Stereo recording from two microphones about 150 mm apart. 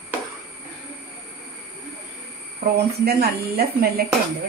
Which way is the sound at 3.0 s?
90° right.